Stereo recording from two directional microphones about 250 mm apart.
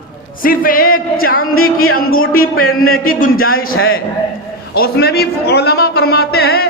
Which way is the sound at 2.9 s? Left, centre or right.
Left.